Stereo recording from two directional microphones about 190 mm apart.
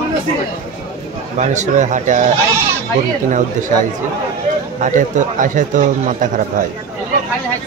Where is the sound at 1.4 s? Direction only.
40° right (ahead or behind).